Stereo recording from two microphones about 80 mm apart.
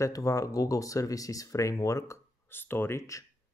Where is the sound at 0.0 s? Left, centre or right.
Left.